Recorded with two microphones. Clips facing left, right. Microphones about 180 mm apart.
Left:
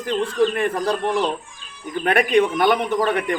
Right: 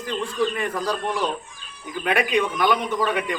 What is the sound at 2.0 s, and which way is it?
A man's voice, 50° left (ahead or behind).